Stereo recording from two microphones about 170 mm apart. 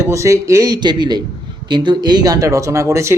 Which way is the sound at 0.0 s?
15° right (ahead or behind).